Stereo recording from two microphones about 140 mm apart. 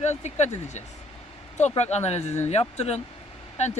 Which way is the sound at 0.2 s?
55° left (ahead or behind).